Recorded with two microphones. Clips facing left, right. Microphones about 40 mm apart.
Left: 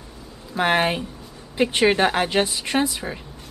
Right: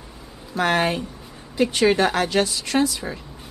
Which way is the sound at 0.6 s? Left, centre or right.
Centre.